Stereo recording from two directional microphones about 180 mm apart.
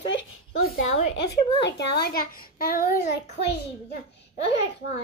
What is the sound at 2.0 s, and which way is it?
Speech, 55° left (ahead or behind).